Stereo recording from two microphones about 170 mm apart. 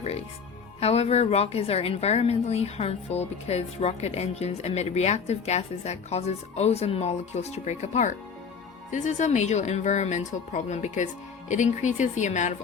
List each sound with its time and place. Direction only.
0.8 s a woman's voice: 35° left (ahead or behind)